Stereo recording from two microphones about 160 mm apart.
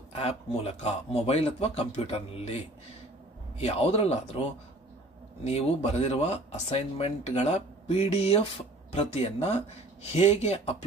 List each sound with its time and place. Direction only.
0.1 s speech: 40° left (ahead or behind)
3.5 s speech: 40° left (ahead or behind)